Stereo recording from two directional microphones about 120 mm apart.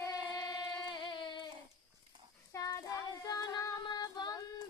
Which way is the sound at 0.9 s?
40° left (ahead or behind).